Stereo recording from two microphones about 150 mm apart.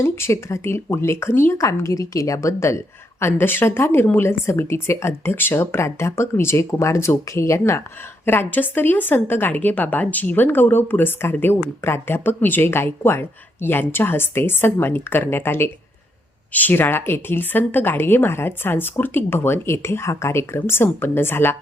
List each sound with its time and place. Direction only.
0.0 s speech: 20° left (ahead or behind)